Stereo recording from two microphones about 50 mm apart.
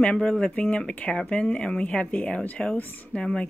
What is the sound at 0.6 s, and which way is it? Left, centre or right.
Speech, left.